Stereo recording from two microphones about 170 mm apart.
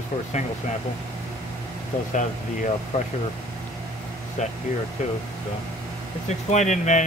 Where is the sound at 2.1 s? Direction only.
45° left (ahead or behind).